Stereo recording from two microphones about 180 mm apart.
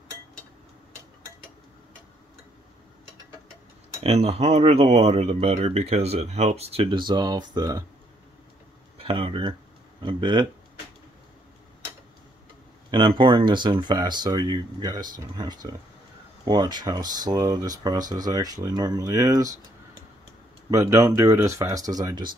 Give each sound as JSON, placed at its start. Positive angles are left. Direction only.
{"t": 4.0, "sound": "speech", "side_deg": -35}
{"t": 8.9, "sound": "speech", "side_deg": -30}
{"t": 12.9, "sound": "speech", "side_deg": -25}
{"t": 20.7, "sound": "speech", "side_deg": -15}